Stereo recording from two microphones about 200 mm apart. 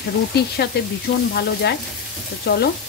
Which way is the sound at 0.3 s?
55° left (ahead or behind).